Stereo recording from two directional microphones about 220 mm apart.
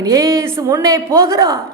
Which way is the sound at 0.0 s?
15° right (ahead or behind).